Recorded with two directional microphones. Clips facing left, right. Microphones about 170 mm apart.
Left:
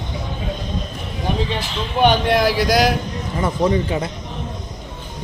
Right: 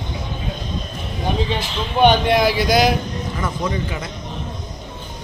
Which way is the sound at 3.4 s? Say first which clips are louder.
Left 7 dB; 30° left (ahead or behind).